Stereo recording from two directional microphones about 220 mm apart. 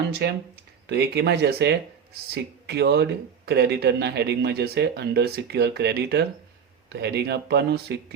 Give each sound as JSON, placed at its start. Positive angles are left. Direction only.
{"t": 0.1, "sound": "speech", "side_deg": -50}